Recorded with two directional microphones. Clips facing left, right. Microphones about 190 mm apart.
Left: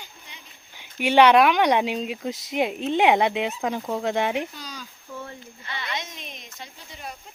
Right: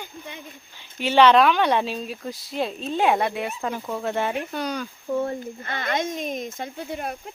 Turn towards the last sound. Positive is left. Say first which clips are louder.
# right 10 dB
turn(degrees=-55)  # may be behind; listen again after turning